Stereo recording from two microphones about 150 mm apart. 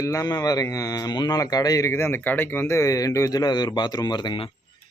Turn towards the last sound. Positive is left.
turn(degrees=30)  # may be behind; listen again after turning